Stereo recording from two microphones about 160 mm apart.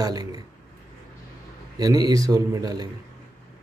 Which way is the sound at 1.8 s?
25° right (ahead or behind).